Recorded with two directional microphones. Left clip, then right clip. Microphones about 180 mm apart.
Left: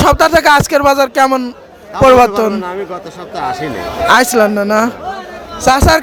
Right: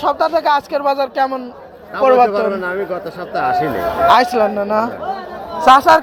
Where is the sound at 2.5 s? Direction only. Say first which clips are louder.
Even; 5° left (ahead or behind).